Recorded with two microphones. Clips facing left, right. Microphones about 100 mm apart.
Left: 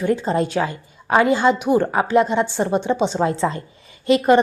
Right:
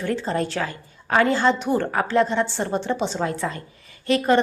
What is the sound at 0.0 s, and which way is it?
A woman's voice, 15° left (ahead or behind).